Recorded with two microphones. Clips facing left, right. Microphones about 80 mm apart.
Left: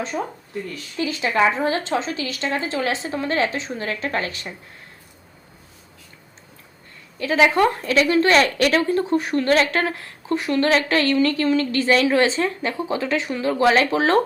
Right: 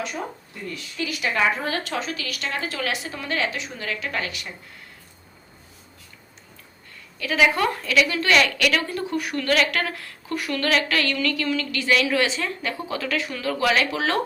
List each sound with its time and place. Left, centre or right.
0.9 s a woman's voice: left
7.2 s a woman's voice: left